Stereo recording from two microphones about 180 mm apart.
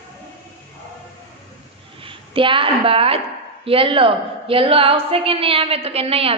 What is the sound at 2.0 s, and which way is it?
A woman's voice, 30° right (ahead or behind).